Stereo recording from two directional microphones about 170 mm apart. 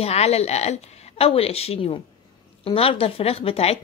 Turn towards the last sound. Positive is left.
turn(degrees=35)  # may be behind; listen again after turning